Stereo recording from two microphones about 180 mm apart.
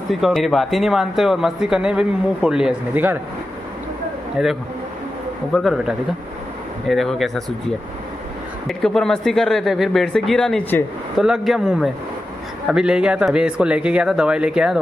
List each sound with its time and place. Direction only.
0.1 s speech: centre (ahead or behind)
4.4 s speech: 5° right (ahead or behind)
8.6 s speech: centre (ahead or behind)